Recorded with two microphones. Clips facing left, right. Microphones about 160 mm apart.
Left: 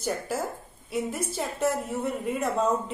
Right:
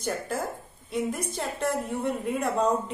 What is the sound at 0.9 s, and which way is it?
A woman's voice, 5° left (ahead or behind).